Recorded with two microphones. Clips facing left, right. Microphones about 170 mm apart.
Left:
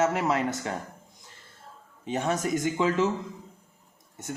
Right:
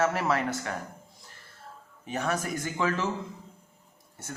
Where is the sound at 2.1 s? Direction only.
25° left (ahead or behind).